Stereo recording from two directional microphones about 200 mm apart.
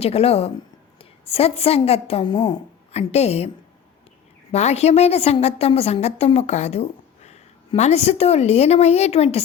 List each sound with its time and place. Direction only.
0.0 s a woman's voice: 30° left (ahead or behind)
4.5 s a woman's voice: 30° left (ahead or behind)